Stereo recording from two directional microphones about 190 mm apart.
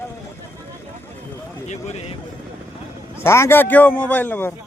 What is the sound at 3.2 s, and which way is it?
A man's voice, 15° left (ahead or behind).